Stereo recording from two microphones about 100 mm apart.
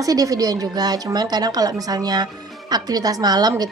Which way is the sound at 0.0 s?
35° right (ahead or behind).